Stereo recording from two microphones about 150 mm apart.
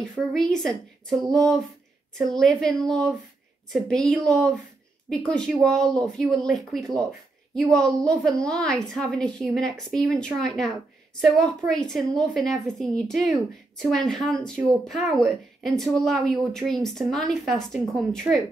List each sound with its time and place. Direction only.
0.1 s speech: 5° left (ahead or behind)